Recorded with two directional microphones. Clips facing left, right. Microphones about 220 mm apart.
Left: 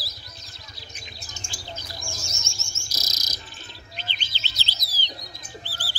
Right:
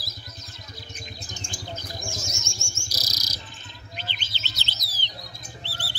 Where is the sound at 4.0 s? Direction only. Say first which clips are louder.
Right 1 dB; 45° right (ahead or behind).